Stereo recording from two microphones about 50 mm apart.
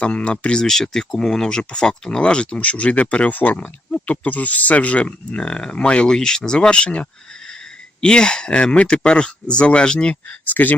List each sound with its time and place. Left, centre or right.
0.0 s speech: left
0.6 s speech: centre
10.2 s speech: left